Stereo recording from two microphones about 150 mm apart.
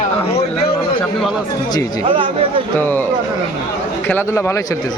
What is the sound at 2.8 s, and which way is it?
Speech, 15° left (ahead or behind).